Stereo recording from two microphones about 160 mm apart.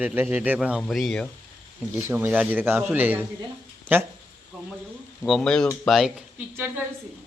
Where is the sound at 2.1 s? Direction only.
10° right (ahead or behind).